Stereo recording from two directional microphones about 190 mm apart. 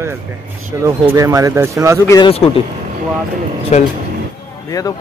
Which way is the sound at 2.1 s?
25° left (ahead or behind).